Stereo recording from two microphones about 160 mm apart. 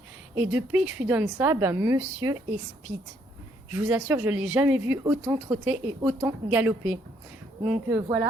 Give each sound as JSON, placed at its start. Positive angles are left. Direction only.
{"t": 0.3, "sound": "speech", "side_deg": -10}
{"t": 3.7, "sound": "speech", "side_deg": -10}